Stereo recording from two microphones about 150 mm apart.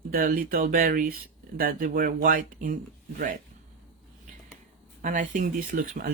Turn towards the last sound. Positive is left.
turn(degrees=-65)  # may be behind; listen again after turning